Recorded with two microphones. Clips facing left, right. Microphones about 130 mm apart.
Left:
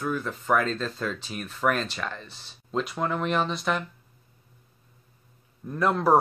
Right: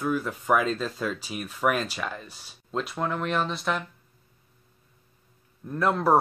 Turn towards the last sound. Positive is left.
turn(degrees=0)  # may be behind; listen again after turning